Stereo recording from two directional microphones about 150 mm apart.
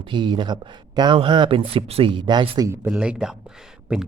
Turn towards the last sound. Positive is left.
turn(degrees=-10)  # may be behind; listen again after turning